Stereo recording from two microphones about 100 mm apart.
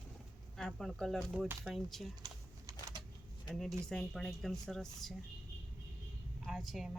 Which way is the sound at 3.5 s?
5° left (ahead or behind).